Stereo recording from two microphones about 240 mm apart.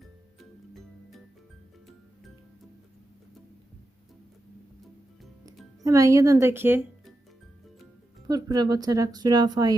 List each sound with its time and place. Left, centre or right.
5.8 s a woman's voice: centre
8.3 s a woman's voice: centre